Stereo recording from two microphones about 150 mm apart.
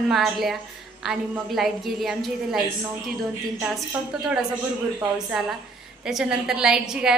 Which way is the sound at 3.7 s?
5° right (ahead or behind).